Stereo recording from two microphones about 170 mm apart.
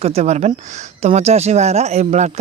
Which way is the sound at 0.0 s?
40° right (ahead or behind).